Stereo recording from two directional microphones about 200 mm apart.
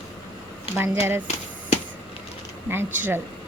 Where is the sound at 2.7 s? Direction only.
10° right (ahead or behind).